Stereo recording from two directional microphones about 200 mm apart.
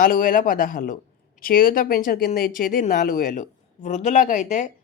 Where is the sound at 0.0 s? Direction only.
45° left (ahead or behind).